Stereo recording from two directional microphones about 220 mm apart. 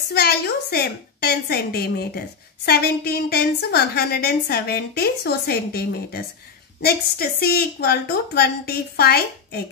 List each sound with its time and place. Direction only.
0.1 s a woman's voice: 45° left (ahead or behind)